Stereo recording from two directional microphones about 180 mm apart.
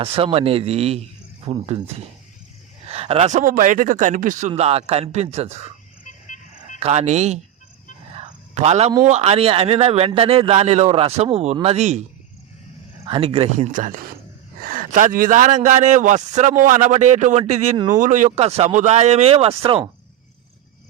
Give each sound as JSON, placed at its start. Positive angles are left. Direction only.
{"t": 0.0, "sound": "speech", "side_deg": -30}
{"t": 2.9, "sound": "speech", "side_deg": -35}
{"t": 6.1, "sound": "vehicle", "side_deg": 45}
{"t": 6.7, "sound": "speech", "side_deg": -35}
{"t": 8.1, "sound": "a sound", "side_deg": -40}
{"t": 9.0, "sound": "speech", "side_deg": -35}
{"t": 13.1, "sound": "speech", "side_deg": -30}
{"t": 13.7, "sound": "speech", "side_deg": -45}